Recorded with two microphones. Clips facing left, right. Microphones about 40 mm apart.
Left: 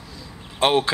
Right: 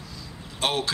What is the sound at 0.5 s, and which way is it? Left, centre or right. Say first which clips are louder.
Speech: left 7 dB; left.